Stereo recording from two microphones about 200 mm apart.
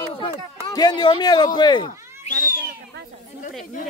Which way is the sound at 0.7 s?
20° left (ahead or behind).